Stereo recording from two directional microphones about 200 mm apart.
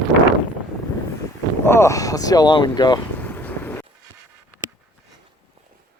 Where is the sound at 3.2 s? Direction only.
10° left (ahead or behind).